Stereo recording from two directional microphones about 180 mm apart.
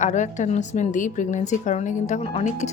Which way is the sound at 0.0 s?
40° left (ahead or behind).